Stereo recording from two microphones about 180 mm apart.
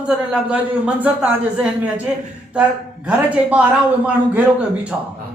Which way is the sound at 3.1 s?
5° right (ahead or behind).